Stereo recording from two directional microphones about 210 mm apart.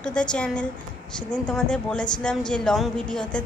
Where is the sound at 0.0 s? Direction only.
5° left (ahead or behind).